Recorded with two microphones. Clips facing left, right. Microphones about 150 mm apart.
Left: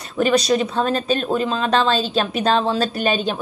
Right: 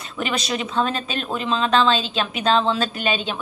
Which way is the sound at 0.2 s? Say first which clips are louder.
Left 8 dB; 35° left (ahead or behind).